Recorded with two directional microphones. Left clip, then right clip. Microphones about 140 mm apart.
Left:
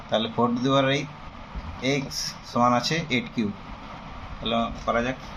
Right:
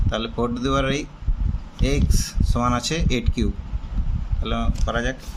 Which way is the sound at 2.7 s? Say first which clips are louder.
Right 1 dB; 55° right (ahead or behind).